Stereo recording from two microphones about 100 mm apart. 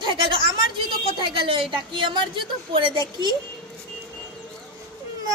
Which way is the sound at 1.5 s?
60° right (ahead or behind).